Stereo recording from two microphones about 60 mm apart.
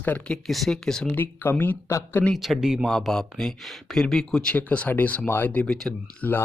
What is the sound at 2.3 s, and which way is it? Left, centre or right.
Speech, centre.